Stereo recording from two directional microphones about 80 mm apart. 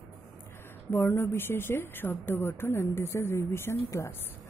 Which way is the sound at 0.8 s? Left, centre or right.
Left.